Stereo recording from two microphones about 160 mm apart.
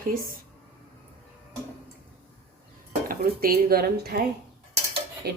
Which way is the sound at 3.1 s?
70° right (ahead or behind).